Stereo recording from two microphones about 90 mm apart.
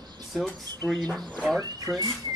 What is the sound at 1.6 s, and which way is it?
Speech, 40° right (ahead or behind).